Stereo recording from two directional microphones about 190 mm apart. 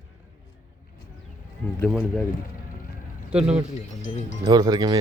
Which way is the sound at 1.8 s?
5° left (ahead or behind).